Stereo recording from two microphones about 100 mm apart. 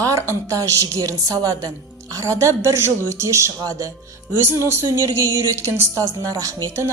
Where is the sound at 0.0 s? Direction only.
30° right (ahead or behind).